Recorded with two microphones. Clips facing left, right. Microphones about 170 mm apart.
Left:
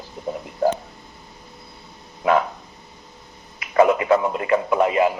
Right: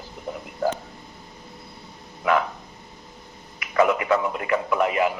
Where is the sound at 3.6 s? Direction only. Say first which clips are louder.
Left 4 dB; 25° left (ahead or behind).